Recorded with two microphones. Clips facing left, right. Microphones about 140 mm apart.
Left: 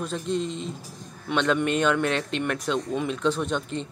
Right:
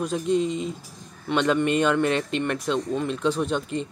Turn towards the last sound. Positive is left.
turn(degrees=-5)  # may be behind; listen again after turning